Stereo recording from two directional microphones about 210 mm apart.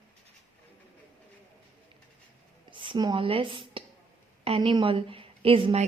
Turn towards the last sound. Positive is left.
turn(degrees=-25)  # may be behind; listen again after turning